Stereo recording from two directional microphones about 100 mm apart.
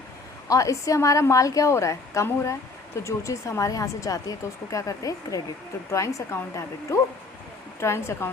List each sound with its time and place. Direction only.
0.4 s speech: 35° left (ahead or behind)